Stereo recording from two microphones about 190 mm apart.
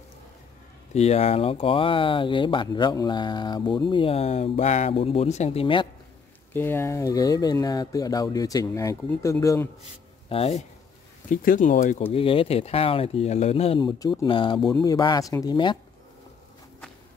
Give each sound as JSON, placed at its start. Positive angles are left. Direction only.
{"t": 0.9, "sound": "speech", "side_deg": 35}
{"t": 6.5, "sound": "speech", "side_deg": 10}
{"t": 10.3, "sound": "speech", "side_deg": 30}
{"t": 11.2, "sound": "speech", "side_deg": 45}
{"t": 12.1, "sound": "speech", "side_deg": 30}